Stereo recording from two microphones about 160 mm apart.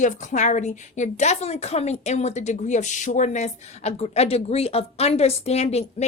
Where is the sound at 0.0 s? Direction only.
50° left (ahead or behind).